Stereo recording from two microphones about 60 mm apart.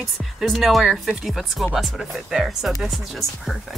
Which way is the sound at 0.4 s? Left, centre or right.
Centre.